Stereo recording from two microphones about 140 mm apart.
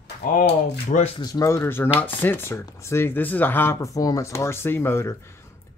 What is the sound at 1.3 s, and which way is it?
Speech, 20° left (ahead or behind).